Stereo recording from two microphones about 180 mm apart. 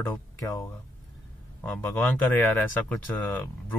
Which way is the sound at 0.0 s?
15° left (ahead or behind).